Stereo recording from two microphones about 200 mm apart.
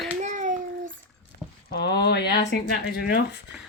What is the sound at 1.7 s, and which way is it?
Speech, 55° left (ahead or behind).